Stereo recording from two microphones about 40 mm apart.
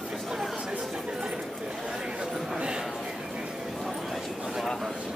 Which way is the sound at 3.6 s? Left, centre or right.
Centre.